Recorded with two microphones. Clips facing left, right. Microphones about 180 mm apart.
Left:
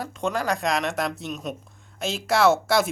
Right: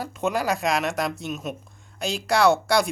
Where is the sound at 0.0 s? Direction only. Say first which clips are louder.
Right 1 dB; 5° right (ahead or behind).